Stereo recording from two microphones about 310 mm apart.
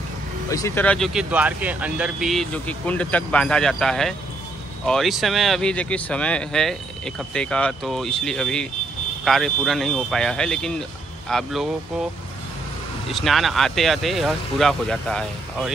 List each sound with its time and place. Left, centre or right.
0.5 s speech: centre
13.1 s speech: centre